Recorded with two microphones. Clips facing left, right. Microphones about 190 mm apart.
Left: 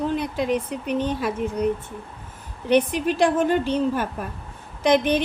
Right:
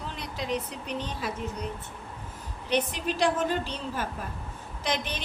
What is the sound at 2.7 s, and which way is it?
A woman's voice, 60° left (ahead or behind).